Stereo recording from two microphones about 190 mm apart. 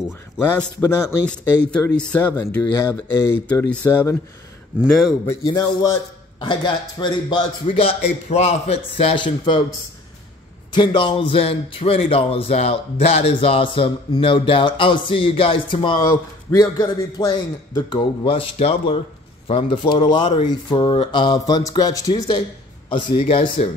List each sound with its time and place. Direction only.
0.6 s a man's voice: 10° left (ahead or behind)
4.7 s a man's voice: centre (ahead or behind)
5.2 s speech: 15° left (ahead or behind)
6.4 s a man's voice: 25° left (ahead or behind)
10.7 s a man's voice: 25° left (ahead or behind)